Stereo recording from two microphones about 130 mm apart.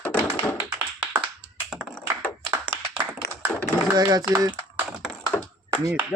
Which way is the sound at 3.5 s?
20° left (ahead or behind).